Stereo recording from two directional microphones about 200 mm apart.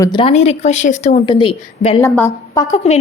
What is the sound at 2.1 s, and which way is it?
Speech, 10° left (ahead or behind).